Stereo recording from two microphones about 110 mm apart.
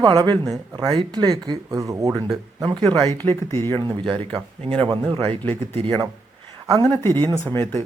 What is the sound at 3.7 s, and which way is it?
Speech, 45° right (ahead or behind).